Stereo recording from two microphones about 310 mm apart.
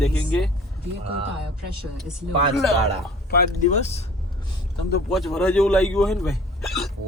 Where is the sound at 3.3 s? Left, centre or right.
Left.